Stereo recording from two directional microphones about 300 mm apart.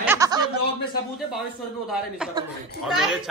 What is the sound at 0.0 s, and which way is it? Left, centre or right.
Chuckle, centre.